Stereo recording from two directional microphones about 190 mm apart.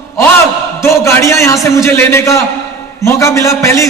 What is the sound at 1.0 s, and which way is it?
A man's voice, 15° left (ahead or behind).